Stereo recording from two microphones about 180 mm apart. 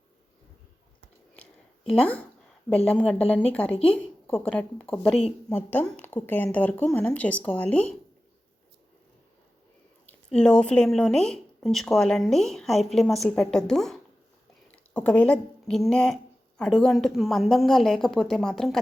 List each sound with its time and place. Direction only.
1.3 s a sound: 5° left (ahead or behind)
2.6 s a woman's voice: 5° left (ahead or behind)
10.3 s speech: 5° left (ahead or behind)